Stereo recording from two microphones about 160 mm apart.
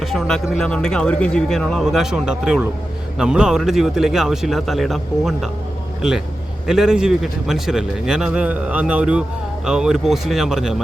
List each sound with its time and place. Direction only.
0.0 s speech: centre (ahead or behind)